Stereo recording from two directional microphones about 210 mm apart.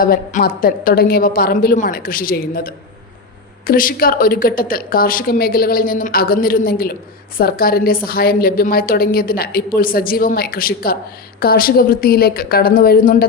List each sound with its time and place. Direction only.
0.0 s a woman's voice: 45° left (ahead or behind)